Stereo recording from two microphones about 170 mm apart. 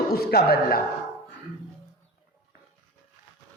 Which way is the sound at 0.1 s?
65° left (ahead or behind).